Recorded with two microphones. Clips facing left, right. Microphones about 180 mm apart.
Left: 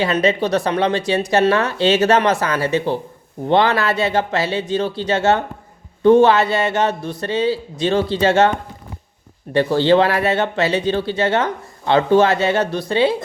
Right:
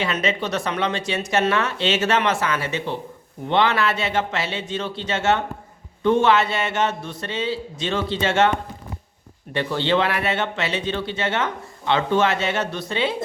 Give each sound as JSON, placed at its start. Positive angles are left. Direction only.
{"t": 0.0, "sound": "speech", "side_deg": 35}
{"t": 9.5, "sound": "speech", "side_deg": 40}